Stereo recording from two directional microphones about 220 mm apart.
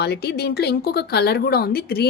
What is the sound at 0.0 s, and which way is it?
Speech, 50° left (ahead or behind).